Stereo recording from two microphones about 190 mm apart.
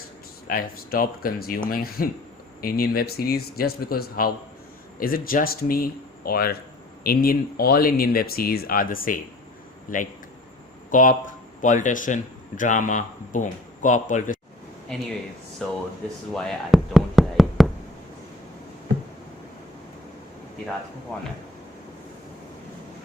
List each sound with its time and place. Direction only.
0.4 s speech: 50° left (ahead or behind)
15.6 s speech: 5° left (ahead or behind)
16.3 s knock: centre (ahead or behind)